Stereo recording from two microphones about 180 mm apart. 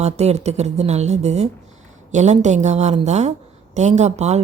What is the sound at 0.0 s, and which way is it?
Speech, 35° right (ahead or behind).